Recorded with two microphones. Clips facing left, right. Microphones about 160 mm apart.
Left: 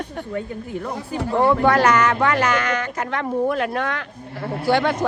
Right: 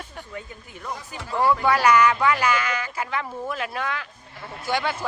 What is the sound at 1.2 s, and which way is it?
Speech, 60° left (ahead or behind).